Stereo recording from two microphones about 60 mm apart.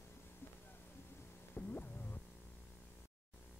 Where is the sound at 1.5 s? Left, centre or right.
Left.